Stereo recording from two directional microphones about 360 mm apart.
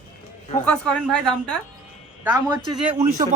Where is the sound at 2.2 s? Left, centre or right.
Centre.